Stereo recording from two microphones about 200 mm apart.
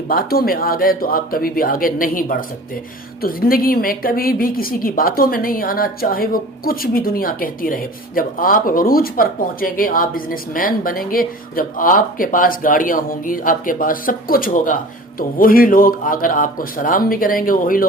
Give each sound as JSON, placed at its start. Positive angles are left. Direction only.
{"t": 0.1, "sound": "a woman's voice", "side_deg": 45}